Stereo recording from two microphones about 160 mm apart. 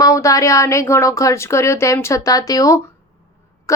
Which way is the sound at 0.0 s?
20° left (ahead or behind).